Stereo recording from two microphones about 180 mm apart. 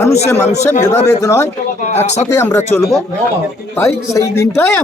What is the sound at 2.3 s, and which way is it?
Speech, 15° left (ahead or behind).